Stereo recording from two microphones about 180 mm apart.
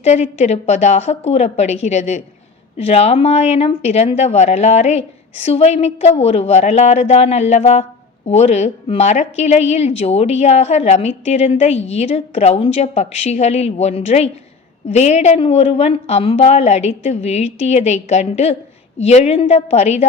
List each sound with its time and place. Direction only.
0.0 s speech: 35° left (ahead or behind)